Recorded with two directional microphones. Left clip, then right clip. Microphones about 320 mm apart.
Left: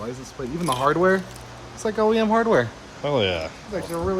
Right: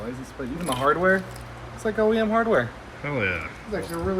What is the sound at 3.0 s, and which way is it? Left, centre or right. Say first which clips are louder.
Speech: left 4 dB; centre.